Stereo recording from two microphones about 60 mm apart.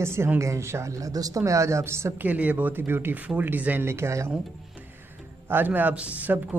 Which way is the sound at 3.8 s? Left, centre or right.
Right.